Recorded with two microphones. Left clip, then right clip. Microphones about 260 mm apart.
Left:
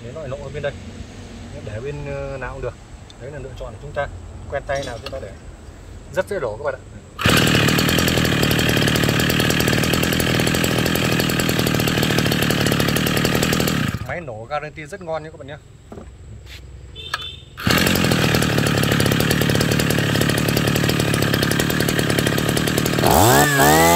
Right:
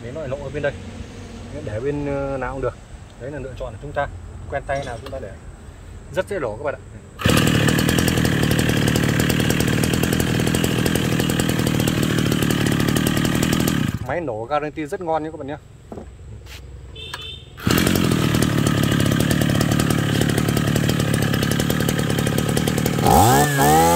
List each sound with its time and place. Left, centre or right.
0.2 s speech: centre
1.9 s speech: centre
6.1 s speech: centre
7.2 s chainsaw: centre
14.0 s speech: right
17.1 s chainsaw: centre